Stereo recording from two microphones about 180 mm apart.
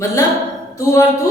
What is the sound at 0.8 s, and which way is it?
Speech, 15° left (ahead or behind).